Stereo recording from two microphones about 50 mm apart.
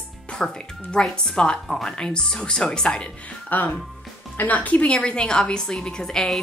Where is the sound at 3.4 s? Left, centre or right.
Left.